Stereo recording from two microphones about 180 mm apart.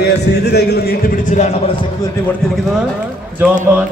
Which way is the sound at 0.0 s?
65° left (ahead or behind).